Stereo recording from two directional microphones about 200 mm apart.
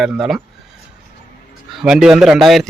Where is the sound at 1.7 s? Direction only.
Centre (ahead or behind).